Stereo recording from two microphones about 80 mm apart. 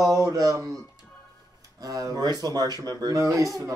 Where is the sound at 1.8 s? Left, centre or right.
Right.